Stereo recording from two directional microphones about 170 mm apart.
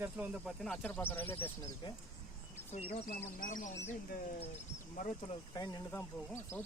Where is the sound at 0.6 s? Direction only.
5° left (ahead or behind).